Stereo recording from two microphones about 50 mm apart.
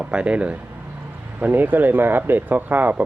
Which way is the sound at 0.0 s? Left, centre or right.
Right.